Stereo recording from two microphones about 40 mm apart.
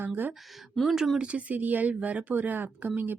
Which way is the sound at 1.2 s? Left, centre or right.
Right.